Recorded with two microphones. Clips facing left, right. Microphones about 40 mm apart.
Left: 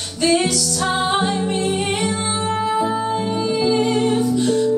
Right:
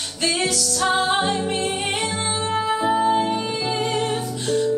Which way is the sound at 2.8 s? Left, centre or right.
Centre.